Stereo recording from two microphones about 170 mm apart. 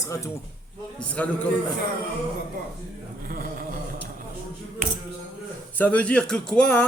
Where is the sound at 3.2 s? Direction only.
55° right (ahead or behind).